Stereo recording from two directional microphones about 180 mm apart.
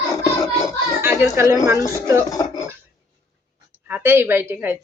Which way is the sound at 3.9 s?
10° right (ahead or behind).